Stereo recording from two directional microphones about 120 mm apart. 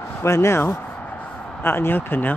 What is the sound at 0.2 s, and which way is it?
Speech, 25° left (ahead or behind).